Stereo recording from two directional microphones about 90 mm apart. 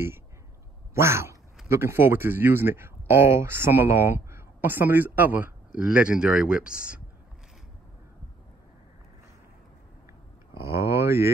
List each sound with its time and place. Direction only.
0.9 s speech: 30° right (ahead or behind); by 7.0 s 10° right (ahead or behind)
10.6 s speech: 30° right (ahead or behind)